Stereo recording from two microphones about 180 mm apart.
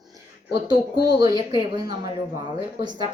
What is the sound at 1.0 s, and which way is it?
Speech, 20° right (ahead or behind).